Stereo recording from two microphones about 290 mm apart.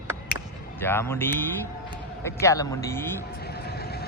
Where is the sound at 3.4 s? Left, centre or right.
Left.